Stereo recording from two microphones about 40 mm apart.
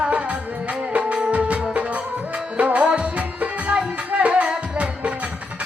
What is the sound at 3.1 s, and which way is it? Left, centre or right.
Music, right.